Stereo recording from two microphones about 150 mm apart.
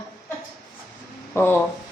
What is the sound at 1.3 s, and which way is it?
Speech, 15° left (ahead or behind).